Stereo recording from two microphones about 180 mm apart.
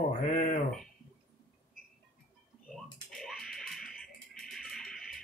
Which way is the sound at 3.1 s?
Centre (ahead or behind).